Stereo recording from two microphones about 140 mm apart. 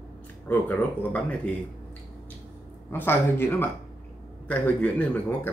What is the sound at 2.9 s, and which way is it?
A man's voice, 15° left (ahead or behind).